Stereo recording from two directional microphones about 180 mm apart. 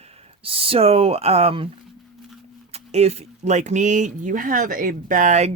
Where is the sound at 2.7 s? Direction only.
35° right (ahead or behind).